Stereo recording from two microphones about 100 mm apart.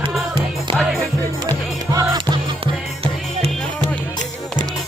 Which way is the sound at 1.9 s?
35° right (ahead or behind).